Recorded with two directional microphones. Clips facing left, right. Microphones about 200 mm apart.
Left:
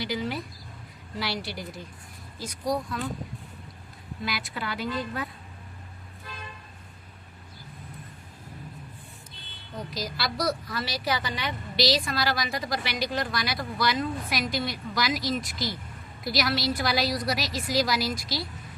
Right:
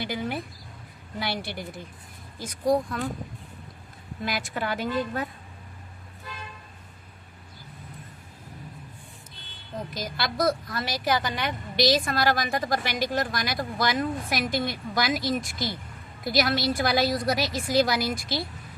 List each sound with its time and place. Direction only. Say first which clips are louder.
0.0 s speech: even; 55° right (ahead or behind)
4.2 s speech: right 4 dB; 50° right (ahead or behind)
9.9 s a woman's voice: even; 50° right (ahead or behind)